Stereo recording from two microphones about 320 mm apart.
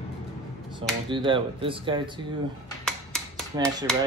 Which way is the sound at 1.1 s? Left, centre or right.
Centre.